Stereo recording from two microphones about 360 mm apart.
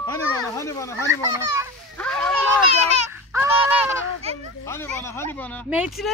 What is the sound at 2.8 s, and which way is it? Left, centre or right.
Speech, centre.